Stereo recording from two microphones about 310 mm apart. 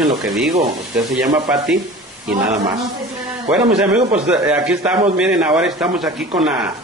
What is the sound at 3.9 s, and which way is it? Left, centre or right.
Speech, right.